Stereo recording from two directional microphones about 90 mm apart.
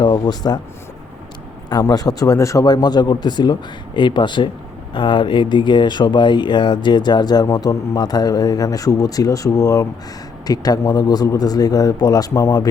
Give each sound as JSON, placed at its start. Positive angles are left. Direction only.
{"t": 0.0, "sound": "speech", "side_deg": 55}
{"t": 1.8, "sound": "speech", "side_deg": 45}